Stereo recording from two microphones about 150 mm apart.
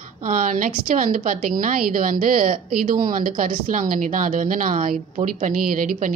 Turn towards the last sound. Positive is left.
turn(degrees=-65)  # may be behind; listen again after turning